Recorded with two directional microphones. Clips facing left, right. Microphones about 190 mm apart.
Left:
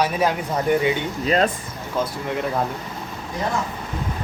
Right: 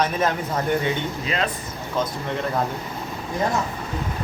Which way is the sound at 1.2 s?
40° left (ahead or behind).